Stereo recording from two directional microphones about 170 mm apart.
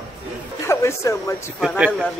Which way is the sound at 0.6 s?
15° left (ahead or behind).